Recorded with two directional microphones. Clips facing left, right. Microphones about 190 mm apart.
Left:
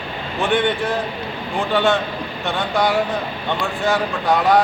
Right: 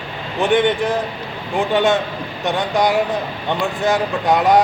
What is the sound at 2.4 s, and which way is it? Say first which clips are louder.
A man's voice: right 2 dB; 15° right (ahead or behind).